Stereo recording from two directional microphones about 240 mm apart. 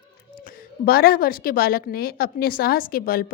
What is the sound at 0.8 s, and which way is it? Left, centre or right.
A woman's voice, left.